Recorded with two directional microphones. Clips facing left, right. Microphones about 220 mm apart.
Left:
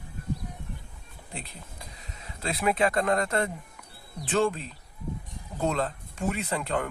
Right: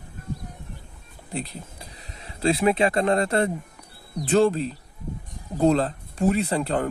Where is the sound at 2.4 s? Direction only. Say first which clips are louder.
Right 6 dB; 30° right (ahead or behind).